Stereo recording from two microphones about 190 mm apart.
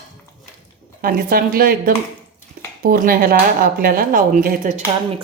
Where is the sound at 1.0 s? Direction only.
50° right (ahead or behind).